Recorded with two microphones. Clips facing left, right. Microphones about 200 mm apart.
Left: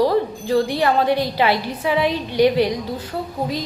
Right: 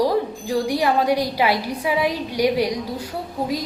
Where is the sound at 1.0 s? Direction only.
25° left (ahead or behind).